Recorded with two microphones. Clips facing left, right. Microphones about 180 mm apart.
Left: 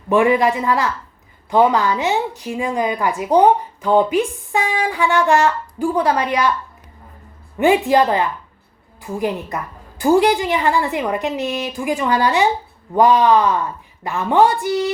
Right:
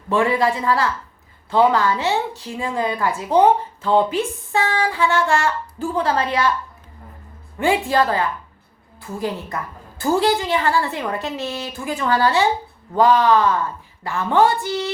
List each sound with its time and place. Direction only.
0.1 s a woman's voice: 15° left (ahead or behind)
7.6 s a woman's voice: 20° left (ahead or behind)